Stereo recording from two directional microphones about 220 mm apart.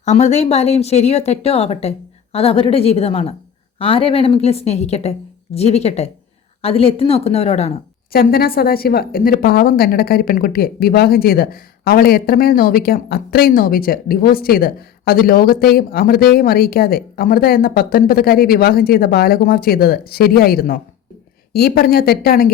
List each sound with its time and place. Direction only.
0.0 s a woman's voice: 30° left (ahead or behind)
8.1 s a woman's voice: 45° left (ahead or behind)